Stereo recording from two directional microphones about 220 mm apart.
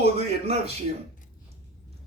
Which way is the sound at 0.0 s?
30° right (ahead or behind).